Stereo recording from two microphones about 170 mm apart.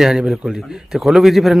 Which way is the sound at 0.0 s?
5° right (ahead or behind).